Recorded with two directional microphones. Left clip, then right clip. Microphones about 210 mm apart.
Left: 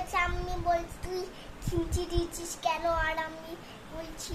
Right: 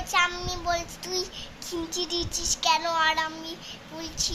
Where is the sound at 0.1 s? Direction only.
5° left (ahead or behind).